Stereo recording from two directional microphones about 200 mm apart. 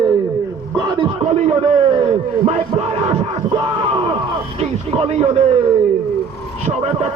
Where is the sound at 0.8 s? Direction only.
20° right (ahead or behind).